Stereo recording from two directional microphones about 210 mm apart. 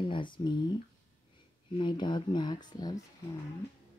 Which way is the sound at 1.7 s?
20° left (ahead or behind).